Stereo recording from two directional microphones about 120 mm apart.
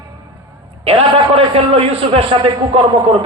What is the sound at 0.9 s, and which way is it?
A man's voice, 50° right (ahead or behind).